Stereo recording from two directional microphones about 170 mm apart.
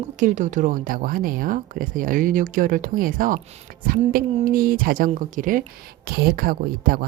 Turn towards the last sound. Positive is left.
turn(degrees=-55)  # may be behind; listen again after turning